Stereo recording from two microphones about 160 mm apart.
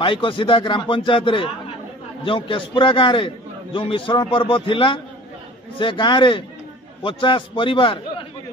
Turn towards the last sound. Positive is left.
turn(degrees=30)  # may be behind; listen again after turning